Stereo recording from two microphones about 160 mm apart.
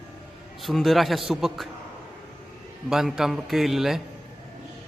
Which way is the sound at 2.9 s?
Centre (ahead or behind).